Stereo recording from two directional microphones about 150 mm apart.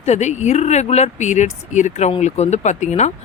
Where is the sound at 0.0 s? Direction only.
50° left (ahead or behind).